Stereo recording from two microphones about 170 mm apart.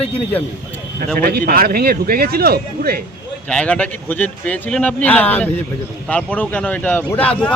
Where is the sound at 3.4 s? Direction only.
5° left (ahead or behind).